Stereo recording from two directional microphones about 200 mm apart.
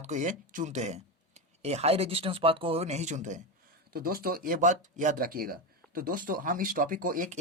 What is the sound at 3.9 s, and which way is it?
Speech, 50° right (ahead or behind).